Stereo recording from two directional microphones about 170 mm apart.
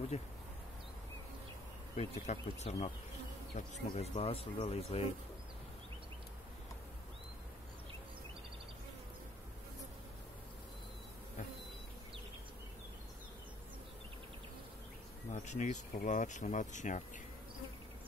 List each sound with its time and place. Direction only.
0.1 s speech: 40° left (ahead or behind)
2.0 s speech: 40° left (ahead or behind)
15.3 s speech: 45° left (ahead or behind)